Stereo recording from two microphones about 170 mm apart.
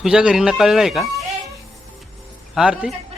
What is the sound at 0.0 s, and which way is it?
Speech, 5° right (ahead or behind).